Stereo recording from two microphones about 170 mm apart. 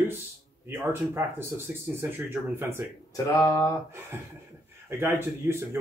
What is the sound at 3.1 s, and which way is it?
Speech, 20° left (ahead or behind).